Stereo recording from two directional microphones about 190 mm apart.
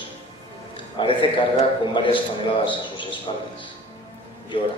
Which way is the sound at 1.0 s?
25° left (ahead or behind).